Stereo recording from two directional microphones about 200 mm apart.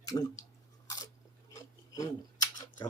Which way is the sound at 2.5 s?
20° left (ahead or behind).